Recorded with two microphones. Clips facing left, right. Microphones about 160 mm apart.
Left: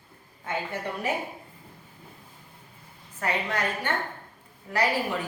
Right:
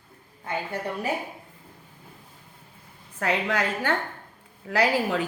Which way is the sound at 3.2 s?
90° right.